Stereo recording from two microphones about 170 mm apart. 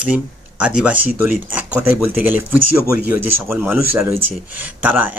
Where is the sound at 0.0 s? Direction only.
10° right (ahead or behind).